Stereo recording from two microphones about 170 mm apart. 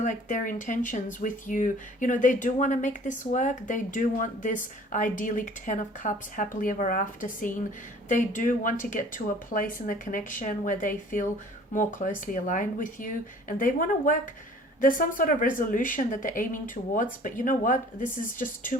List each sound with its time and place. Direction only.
0.0 s speech: 50° left (ahead or behind)